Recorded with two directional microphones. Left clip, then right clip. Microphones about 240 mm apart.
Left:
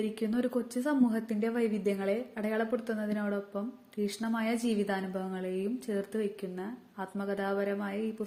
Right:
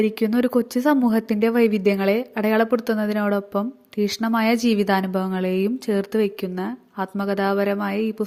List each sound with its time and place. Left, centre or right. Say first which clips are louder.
0.0 s speech: right 12 dB; right